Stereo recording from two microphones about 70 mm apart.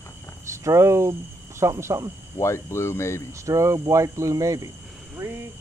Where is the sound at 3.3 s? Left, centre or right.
Right.